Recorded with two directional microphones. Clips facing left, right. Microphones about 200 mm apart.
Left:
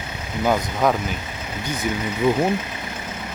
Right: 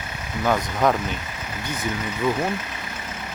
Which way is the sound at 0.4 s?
5° left (ahead or behind).